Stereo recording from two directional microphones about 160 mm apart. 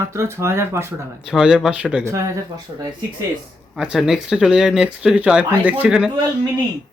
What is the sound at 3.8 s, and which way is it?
Speech, 5° right (ahead or behind).